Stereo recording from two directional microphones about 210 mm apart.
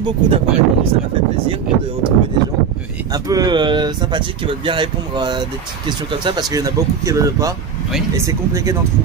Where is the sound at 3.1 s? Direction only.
15° right (ahead or behind).